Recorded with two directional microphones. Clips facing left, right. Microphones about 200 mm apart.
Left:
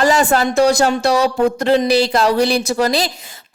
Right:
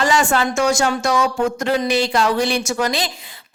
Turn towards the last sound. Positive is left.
turn(degrees=35)  # may be behind; listen again after turning